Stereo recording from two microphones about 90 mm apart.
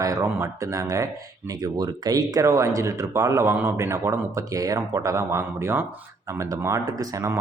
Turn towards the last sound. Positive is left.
turn(degrees=-40)  # may be behind; listen again after turning